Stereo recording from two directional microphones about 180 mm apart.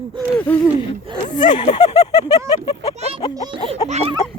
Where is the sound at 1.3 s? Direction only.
25° left (ahead or behind).